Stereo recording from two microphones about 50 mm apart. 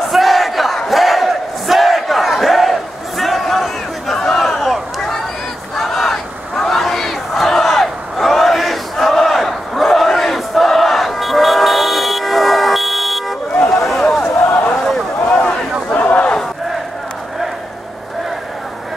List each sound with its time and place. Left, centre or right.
0.1 s crowd: centre
0.8 s battle cry: centre
4.2 s crowd: centre
5.8 s battle cry: centre
13.7 s a sound: centre
15.2 s a sound: left